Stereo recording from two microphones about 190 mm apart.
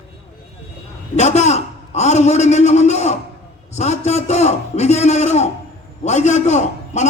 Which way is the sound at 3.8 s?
35° left (ahead or behind).